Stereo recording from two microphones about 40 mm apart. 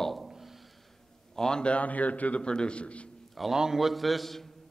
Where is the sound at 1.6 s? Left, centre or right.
Left.